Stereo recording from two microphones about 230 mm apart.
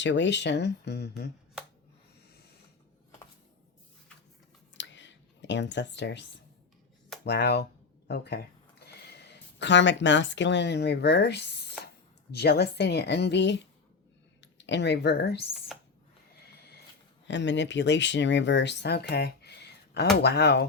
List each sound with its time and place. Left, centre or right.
0.0 s speech: left
4.7 s a sound: left
7.3 s speech: left
17.2 s speech: left